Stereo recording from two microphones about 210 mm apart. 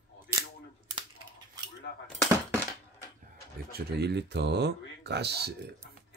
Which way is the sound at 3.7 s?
50° right (ahead or behind).